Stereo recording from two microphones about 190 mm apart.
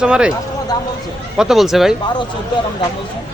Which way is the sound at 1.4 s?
Centre (ahead or behind).